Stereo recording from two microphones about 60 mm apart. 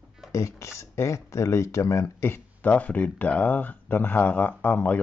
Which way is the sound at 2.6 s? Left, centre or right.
Left.